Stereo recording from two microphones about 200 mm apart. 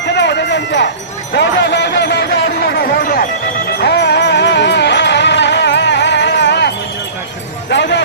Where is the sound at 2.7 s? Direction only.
50° left (ahead or behind).